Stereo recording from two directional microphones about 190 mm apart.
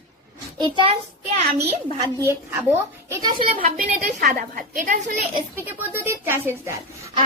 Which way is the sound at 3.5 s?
50° right (ahead or behind).